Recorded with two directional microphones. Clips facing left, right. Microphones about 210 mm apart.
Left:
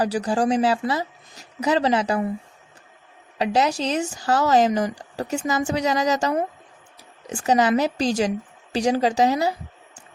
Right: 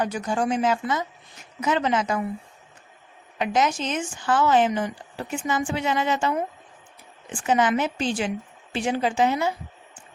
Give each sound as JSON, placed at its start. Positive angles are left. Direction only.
{"t": 0.0, "sound": "speech", "side_deg": 35}
{"t": 3.3, "sound": "speech", "side_deg": 35}